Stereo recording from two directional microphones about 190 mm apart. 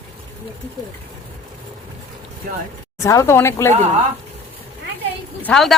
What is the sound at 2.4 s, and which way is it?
Speech, 50° right (ahead or behind).